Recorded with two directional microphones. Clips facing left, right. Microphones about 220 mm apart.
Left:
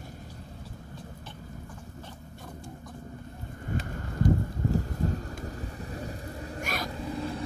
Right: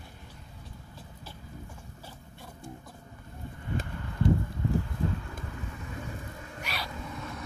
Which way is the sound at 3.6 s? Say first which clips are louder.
Left 1 dB; 45° left (ahead or behind).